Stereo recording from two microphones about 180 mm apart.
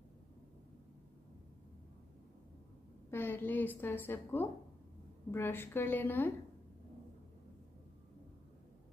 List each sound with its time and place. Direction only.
3.1 s a woman's voice: 10° left (ahead or behind)